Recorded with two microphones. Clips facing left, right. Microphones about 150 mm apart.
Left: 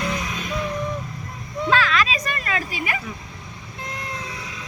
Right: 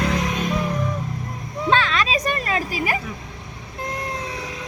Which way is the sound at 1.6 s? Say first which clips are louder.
Even; 30° right (ahead or behind).